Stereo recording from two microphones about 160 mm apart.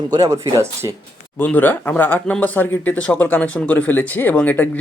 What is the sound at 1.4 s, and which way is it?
Speech, 10° left (ahead or behind).